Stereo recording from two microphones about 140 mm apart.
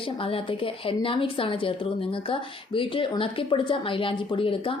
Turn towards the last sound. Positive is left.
turn(degrees=40)  # may be behind; listen again after turning